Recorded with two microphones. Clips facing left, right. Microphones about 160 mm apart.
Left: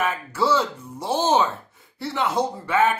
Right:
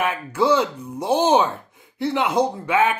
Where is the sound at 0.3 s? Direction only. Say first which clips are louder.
Right 4 dB; 15° right (ahead or behind).